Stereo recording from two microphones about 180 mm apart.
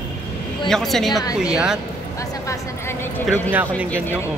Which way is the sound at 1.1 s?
20° left (ahead or behind).